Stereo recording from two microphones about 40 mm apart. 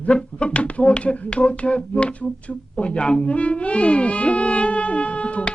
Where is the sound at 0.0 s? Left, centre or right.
Left.